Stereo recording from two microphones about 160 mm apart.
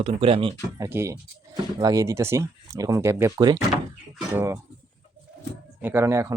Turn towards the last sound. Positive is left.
turn(degrees=-20)  # may be behind; listen again after turning